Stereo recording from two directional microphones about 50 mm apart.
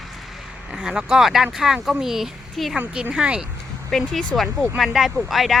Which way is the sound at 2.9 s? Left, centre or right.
Centre.